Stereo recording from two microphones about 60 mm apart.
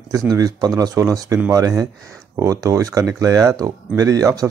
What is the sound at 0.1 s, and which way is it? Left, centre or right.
Speech, right.